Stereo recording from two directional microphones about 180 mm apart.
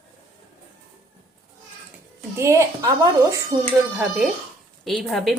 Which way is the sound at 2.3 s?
15° right (ahead or behind).